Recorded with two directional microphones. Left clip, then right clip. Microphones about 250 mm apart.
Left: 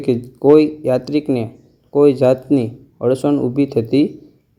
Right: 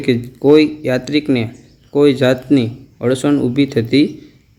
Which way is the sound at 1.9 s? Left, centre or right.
Centre.